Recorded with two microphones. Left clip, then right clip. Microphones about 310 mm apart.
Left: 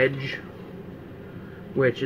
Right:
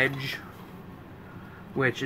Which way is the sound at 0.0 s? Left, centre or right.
Centre.